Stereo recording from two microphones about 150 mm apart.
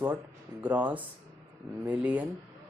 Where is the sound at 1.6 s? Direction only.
25° right (ahead or behind).